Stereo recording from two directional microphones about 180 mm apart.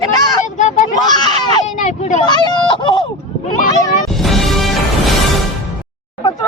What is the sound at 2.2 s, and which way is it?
Speech, 25° left (ahead or behind).